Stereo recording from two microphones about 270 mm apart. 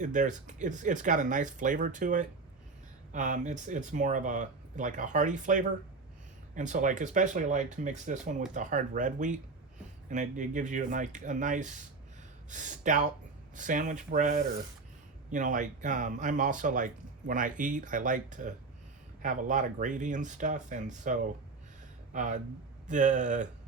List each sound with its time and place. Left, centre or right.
0.0 s speech: right